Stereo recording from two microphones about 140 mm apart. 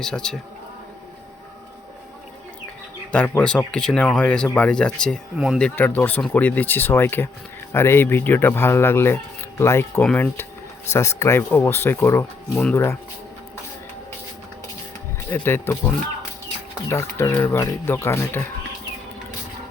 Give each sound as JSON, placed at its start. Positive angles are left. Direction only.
{"t": 0.0, "sound": "speech", "side_deg": 5}
{"t": 3.1, "sound": "speech", "side_deg": 10}
{"t": 10.0, "sound": "speech", "side_deg": 5}
{"t": 10.9, "sound": "speech", "side_deg": 20}
{"t": 15.3, "sound": "speech", "side_deg": 15}
{"t": 16.9, "sound": "speech", "side_deg": 20}